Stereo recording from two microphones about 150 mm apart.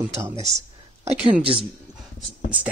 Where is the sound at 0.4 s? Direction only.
50° right (ahead or behind).